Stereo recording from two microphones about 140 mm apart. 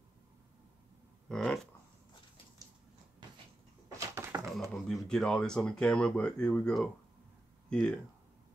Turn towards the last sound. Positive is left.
turn(degrees=5)  # may be behind; listen again after turning